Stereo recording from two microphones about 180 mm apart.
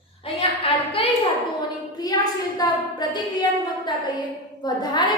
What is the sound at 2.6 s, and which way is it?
Speech, 20° left (ahead or behind).